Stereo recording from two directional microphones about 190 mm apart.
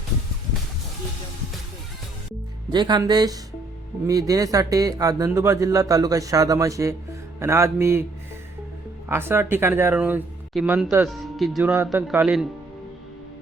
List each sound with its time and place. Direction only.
2.7 s speech: 25° right (ahead or behind)
9.0 s speech: 10° right (ahead or behind)
11.7 s speech: 10° right (ahead or behind)